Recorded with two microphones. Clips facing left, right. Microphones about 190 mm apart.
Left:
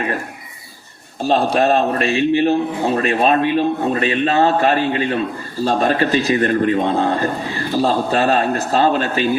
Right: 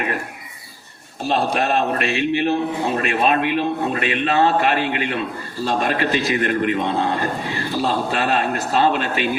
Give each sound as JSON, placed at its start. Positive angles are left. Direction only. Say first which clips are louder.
{"t": 1.3, "sound": "a man's voice", "louder": "left 5 dB", "side_deg": 35}